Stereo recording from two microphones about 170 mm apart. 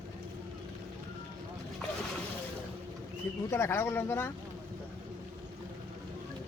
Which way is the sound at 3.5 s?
15° left (ahead or behind).